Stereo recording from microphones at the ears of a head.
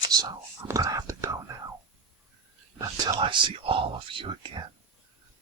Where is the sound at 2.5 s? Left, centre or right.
Right.